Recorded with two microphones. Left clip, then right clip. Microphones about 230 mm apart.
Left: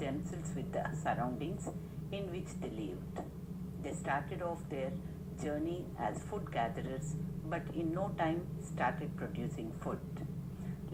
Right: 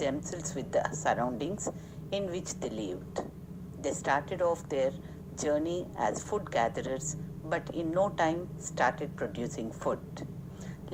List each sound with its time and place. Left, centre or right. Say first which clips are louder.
0.0 s a woman's voice: right 8 dB; right